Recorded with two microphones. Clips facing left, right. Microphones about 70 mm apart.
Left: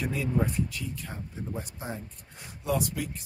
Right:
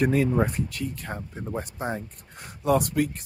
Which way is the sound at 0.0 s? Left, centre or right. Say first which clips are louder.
Right 7 dB; right.